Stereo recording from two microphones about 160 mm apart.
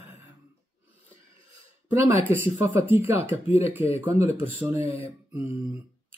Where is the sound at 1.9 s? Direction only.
15° right (ahead or behind).